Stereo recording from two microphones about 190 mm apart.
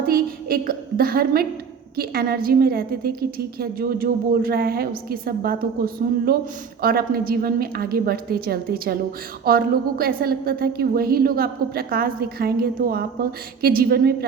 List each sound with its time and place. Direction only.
0.0 s a woman's voice: 50° right (ahead or behind)